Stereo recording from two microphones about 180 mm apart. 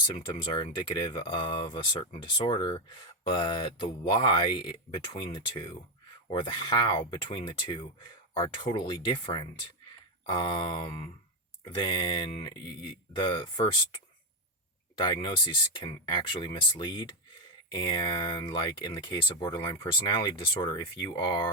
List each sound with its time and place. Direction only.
0.5 s speech: 25° left (ahead or behind)
15.0 s speech: 25° left (ahead or behind)